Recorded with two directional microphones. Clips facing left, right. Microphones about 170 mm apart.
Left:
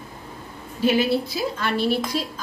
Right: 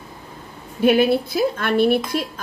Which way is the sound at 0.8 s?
55° right (ahead or behind).